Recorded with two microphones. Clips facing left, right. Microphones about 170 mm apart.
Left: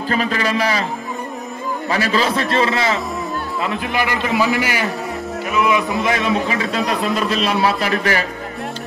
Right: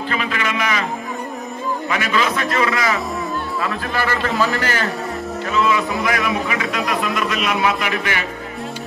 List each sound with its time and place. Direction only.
0.1 s a man's voice: 35° left (ahead or behind)
1.9 s a man's voice: 35° left (ahead or behind)
3.6 s a man's voice: 15° left (ahead or behind); by 8.3 s 35° left (ahead or behind)